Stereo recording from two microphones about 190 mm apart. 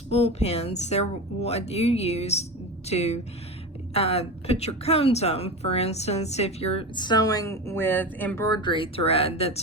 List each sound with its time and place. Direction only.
0.1 s a woman's voice: 35° left (ahead or behind)